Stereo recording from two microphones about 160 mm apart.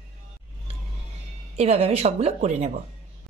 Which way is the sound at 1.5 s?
40° right (ahead or behind).